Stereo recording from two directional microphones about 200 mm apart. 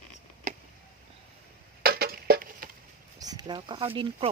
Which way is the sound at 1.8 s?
50° right (ahead or behind).